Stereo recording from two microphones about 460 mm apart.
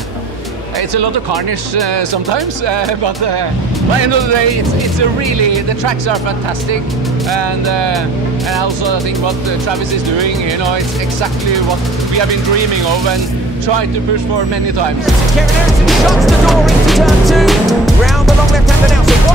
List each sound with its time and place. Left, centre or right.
0.9 s speech: right
2.0 s speech: right
8.9 s speech: right
15.8 s speech: centre